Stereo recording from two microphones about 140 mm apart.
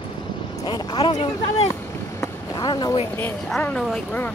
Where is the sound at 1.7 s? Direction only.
25° left (ahead or behind).